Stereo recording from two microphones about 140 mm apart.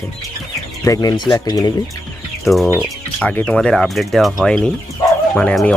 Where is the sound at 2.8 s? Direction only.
10° left (ahead or behind).